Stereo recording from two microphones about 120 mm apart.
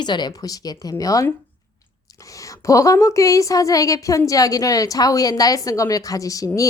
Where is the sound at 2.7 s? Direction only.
30° left (ahead or behind).